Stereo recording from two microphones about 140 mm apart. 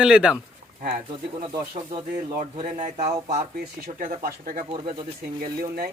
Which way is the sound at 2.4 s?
55° right (ahead or behind).